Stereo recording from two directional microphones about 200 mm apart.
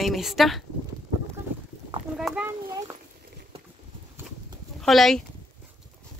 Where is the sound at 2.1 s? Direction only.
5° right (ahead or behind).